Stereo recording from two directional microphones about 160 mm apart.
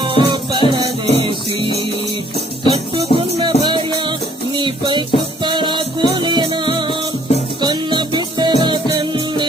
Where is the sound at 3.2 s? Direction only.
35° right (ahead or behind).